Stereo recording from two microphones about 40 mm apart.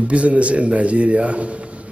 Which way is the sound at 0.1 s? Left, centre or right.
Right.